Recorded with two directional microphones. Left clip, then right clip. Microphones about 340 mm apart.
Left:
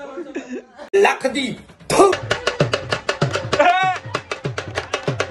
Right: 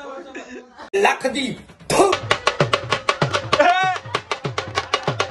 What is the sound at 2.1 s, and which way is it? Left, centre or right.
Music, centre.